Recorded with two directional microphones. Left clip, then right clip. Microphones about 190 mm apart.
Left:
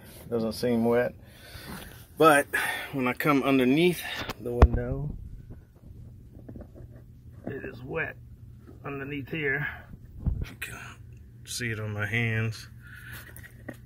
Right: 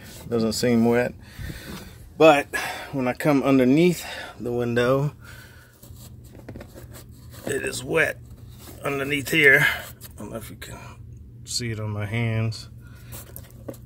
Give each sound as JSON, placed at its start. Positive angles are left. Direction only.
{"t": 0.3, "sound": "speech", "side_deg": -25}
{"t": 2.1, "sound": "speech", "side_deg": 10}
{"t": 2.5, "sound": "speech", "side_deg": -15}
{"t": 4.4, "sound": "speech", "side_deg": -35}
{"t": 7.4, "sound": "speech", "side_deg": -45}
{"t": 11.6, "sound": "speech", "side_deg": -10}